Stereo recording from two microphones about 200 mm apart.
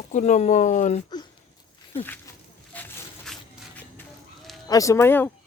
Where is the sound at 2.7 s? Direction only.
10° left (ahead or behind).